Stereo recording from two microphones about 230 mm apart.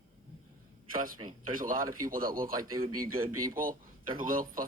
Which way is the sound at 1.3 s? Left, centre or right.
Right.